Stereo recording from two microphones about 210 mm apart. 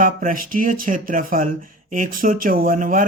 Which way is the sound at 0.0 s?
40° right (ahead or behind).